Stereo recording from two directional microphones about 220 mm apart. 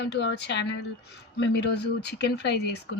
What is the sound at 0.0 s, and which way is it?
Speech, 50° left (ahead or behind).